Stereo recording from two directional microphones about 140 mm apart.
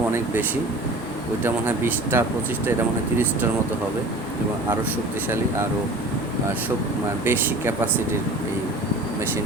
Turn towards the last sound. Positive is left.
turn(degrees=-15)  # may be behind; listen again after turning